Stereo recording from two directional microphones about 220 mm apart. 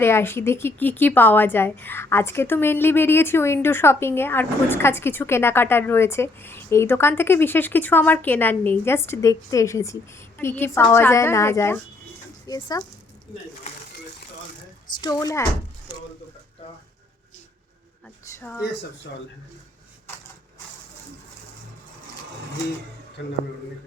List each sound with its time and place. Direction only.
0.0 s a woman's voice: 10° left (ahead or behind)
15.0 s a woman's voice: 15° left (ahead or behind)
18.3 s a woman's voice: 10° left (ahead or behind)